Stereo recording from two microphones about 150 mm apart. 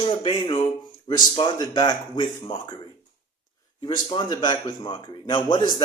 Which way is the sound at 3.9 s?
30° left (ahead or behind).